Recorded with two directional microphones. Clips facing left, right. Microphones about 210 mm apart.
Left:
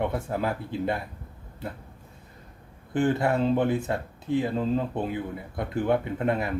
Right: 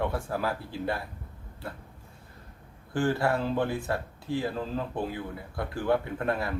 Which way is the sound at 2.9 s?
20° left (ahead or behind).